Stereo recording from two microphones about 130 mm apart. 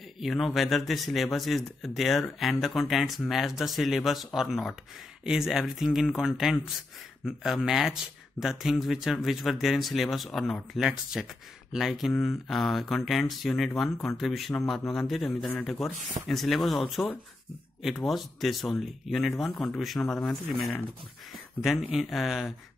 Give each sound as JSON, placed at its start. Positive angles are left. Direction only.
{"t": 0.2, "sound": "speech", "side_deg": 0}
{"t": 15.9, "sound": "speech", "side_deg": -70}
{"t": 16.3, "sound": "speech", "side_deg": 0}
{"t": 18.0, "sound": "speech", "side_deg": 0}